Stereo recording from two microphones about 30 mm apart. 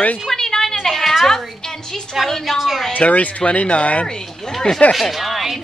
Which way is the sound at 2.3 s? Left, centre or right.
Centre.